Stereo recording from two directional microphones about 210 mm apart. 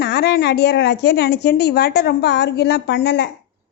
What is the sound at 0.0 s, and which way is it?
A woman's voice, 50° left (ahead or behind).